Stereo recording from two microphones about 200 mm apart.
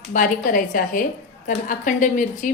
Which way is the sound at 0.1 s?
40° left (ahead or behind).